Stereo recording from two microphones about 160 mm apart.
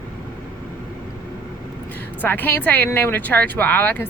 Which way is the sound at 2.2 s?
10° left (ahead or behind).